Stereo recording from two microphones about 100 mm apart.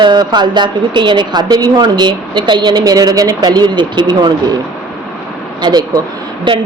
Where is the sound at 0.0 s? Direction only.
50° right (ahead or behind).